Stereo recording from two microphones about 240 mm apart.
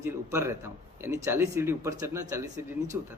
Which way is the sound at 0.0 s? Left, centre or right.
Centre.